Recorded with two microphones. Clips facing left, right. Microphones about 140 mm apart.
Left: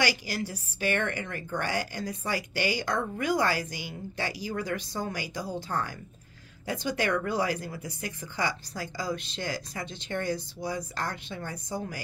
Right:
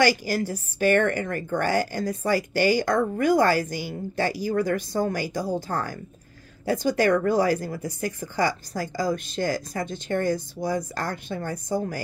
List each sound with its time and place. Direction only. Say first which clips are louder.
0.0 s a woman's voice: right 8 dB; 45° right (ahead or behind)